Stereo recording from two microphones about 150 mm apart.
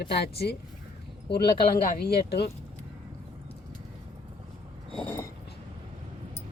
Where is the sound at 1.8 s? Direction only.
90° left.